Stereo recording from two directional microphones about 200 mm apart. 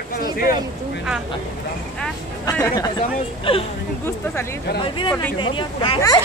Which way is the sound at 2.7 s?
25° left (ahead or behind).